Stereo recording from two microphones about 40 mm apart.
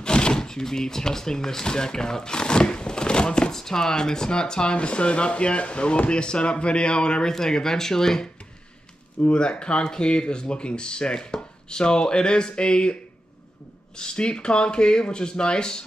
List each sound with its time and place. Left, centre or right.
0.0 s speech: left
9.2 s speech: left
13.9 s speech: left